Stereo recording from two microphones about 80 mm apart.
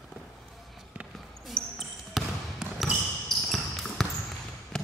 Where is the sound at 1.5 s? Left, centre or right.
Centre.